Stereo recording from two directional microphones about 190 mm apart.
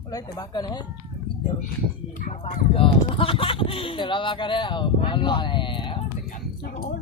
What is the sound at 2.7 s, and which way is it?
Speech, 30° left (ahead or behind).